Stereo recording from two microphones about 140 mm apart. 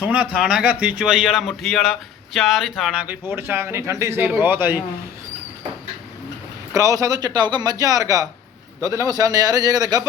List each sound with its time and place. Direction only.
0.0 s a man's voice: 10° right (ahead or behind)
6.7 s a man's voice: 25° right (ahead or behind)